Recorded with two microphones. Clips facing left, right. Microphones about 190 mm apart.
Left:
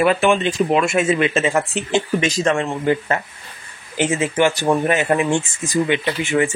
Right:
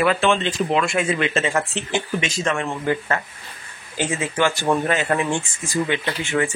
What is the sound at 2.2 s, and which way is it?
Speech, 35° left (ahead or behind).